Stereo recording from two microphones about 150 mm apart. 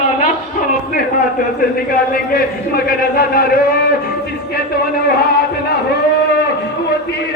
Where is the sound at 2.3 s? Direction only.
80° left.